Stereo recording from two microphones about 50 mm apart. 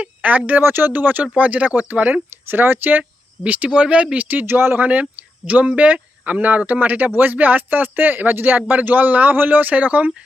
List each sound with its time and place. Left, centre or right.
0.0 s speech: right
2.5 s speech: right
3.0 s speech: right
4.3 s speech: right